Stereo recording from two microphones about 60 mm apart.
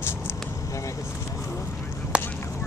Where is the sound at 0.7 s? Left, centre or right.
Left.